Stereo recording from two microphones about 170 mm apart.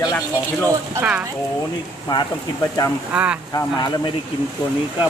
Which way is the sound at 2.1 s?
25° left (ahead or behind).